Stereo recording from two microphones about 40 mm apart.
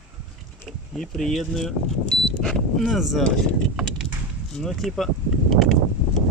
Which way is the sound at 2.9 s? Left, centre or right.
Centre.